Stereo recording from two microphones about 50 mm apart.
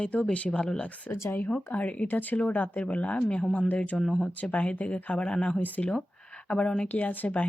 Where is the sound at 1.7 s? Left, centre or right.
Left.